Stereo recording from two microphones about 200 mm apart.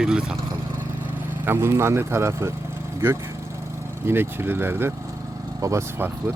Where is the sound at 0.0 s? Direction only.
5° right (ahead or behind).